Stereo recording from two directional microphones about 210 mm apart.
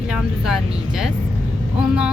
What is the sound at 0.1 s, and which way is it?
A woman's voice, 5° right (ahead or behind).